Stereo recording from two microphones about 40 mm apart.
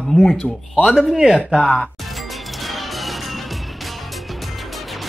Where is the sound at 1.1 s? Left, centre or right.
Centre.